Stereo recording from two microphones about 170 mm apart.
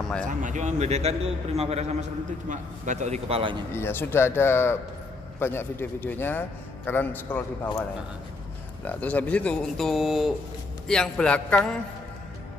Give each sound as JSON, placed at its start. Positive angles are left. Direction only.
{"t": 0.4, "sound": "a man's voice", "side_deg": -45}
{"t": 3.7, "sound": "speech", "side_deg": 15}
{"t": 8.8, "sound": "speech", "side_deg": 10}